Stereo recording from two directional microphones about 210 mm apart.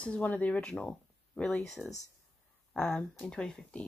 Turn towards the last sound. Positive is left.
turn(degrees=5)  # may be behind; listen again after turning